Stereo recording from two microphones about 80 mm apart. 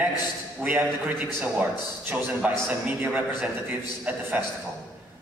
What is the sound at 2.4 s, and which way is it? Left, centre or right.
Speech, centre.